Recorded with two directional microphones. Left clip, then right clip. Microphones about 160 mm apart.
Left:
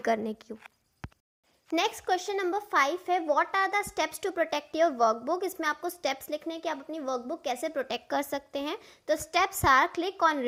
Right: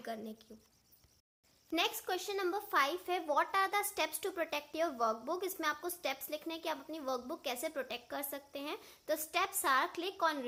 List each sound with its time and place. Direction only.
0.0 s speech: 55° left (ahead or behind)
1.7 s speech: 30° left (ahead or behind)
7.9 s a woman's voice: 40° left (ahead or behind)
8.8 s speech: 25° left (ahead or behind)